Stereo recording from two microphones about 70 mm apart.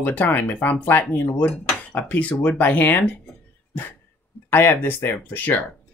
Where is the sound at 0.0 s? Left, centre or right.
Left.